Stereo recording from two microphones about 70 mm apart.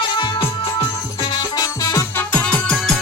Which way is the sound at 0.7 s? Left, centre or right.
Left.